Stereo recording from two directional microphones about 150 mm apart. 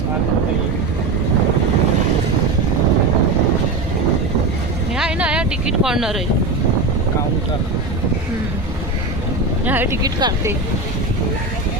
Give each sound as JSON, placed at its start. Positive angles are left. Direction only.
{"t": 4.9, "sound": "a sound", "side_deg": -5}
{"t": 9.6, "sound": "speech", "side_deg": -15}
{"t": 10.0, "sound": "speech", "side_deg": -25}